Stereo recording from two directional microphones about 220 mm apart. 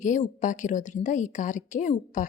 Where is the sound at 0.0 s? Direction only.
35° left (ahead or behind).